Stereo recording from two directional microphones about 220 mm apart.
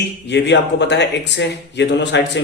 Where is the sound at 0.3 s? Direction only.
50° left (ahead or behind).